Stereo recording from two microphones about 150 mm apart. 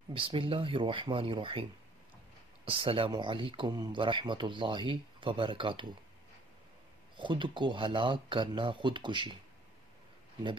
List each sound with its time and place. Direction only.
0.1 s speech: 35° right (ahead or behind)
7.2 s speech: 35° right (ahead or behind)